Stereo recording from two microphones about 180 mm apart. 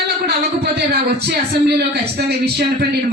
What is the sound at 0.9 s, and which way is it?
Speech, 65° right (ahead or behind).